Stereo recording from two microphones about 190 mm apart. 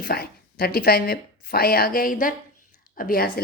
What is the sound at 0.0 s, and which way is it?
Speech, 55° left (ahead or behind).